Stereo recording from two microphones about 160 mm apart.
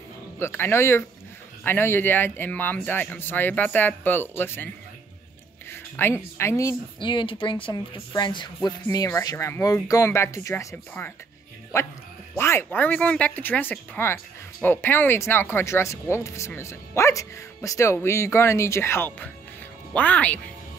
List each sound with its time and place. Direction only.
0.4 s speech: 15° left (ahead or behind)
5.7 s a sound: 15° left (ahead or behind)
6.3 s speech: 20° left (ahead or behind)
7.0 s a woman's voice: 30° left (ahead or behind); by 20.3 s 10° left (ahead or behind)